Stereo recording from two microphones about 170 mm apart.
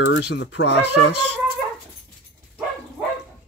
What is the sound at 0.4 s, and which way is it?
Speech, 90° left.